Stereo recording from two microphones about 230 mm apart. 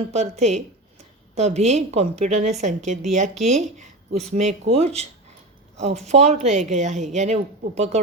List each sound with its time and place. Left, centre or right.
0.1 s a woman's voice: right
6.1 s a woman's voice: right